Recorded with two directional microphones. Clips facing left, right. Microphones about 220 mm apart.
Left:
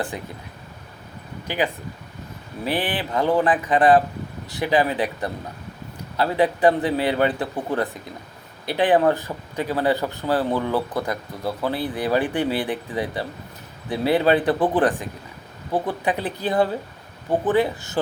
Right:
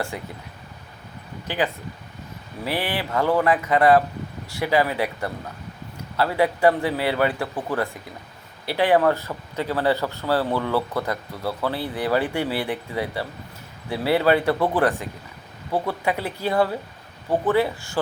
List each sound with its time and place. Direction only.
0.1 s speech: 20° left (ahead or behind)
1.5 s speech: 15° left (ahead or behind)